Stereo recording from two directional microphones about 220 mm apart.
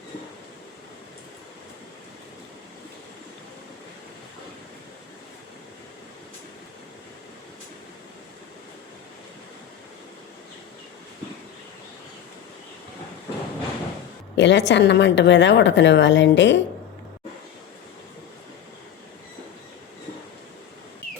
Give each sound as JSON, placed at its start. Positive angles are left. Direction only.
{"t": 14.3, "sound": "speech", "side_deg": 55}